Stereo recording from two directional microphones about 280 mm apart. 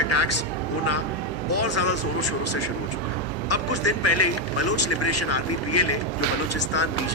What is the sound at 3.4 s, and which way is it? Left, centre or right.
A man's voice, left.